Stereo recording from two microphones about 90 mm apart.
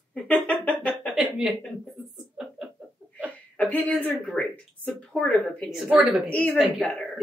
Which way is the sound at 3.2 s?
15° left (ahead or behind).